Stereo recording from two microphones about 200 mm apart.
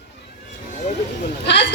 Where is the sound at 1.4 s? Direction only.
60° left (ahead or behind).